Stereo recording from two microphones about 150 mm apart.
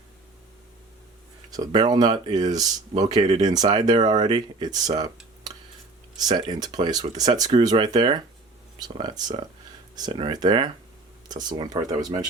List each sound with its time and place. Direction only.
1.5 s speech: 25° right (ahead or behind)
3.2 s speech: 45° right (ahead or behind)
3.4 s speech: 25° right (ahead or behind)
6.1 s speech: 30° right (ahead or behind)